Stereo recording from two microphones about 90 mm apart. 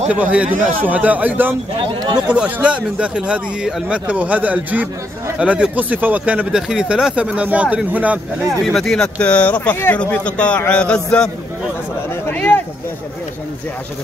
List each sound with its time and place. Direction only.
0.1 s speech: 15° right (ahead or behind)
8.7 s speech: 5° left (ahead or behind)
12.3 s a sound: 20° left (ahead or behind)